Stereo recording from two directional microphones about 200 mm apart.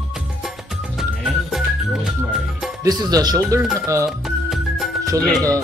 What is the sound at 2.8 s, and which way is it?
Speech, 20° right (ahead or behind).